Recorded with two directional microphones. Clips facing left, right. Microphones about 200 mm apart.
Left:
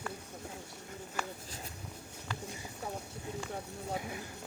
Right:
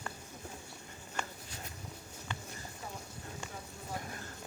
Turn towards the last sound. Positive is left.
turn(degrees=10)  # may be behind; listen again after turning